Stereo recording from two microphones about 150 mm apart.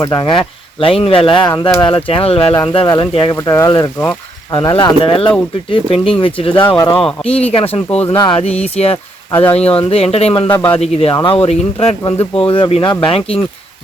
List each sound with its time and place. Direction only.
0.0 s speech: 25° left (ahead or behind)
3.3 s speech: 20° left (ahead or behind); by 7.8 s 40° left (ahead or behind)
8.0 s speech: 25° left (ahead or behind)